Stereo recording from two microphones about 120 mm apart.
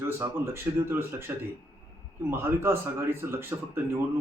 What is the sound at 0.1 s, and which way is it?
Speech, 20° right (ahead or behind).